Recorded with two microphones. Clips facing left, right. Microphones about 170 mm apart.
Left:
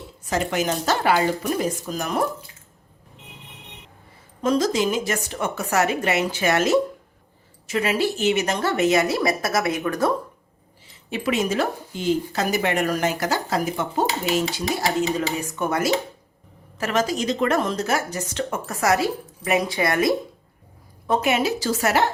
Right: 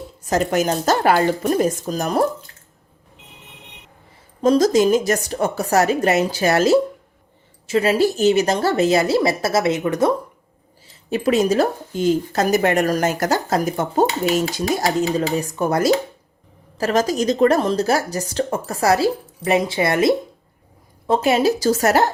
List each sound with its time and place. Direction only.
0.3 s speech: 40° right (ahead or behind)
4.4 s speech: 40° right (ahead or behind); by 10.2 s 20° right (ahead or behind)
11.1 s speech: 40° right (ahead or behind)